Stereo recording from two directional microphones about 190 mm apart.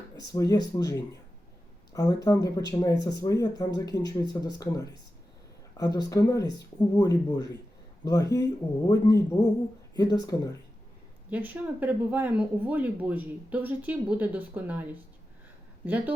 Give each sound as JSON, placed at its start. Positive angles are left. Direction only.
{"t": 0.3, "sound": "speech", "side_deg": 20}
{"t": 1.9, "sound": "speech", "side_deg": 20}
{"t": 11.3, "sound": "speech", "side_deg": -10}